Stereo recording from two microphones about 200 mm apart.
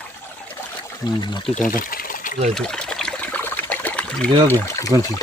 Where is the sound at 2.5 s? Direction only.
5° left (ahead or behind).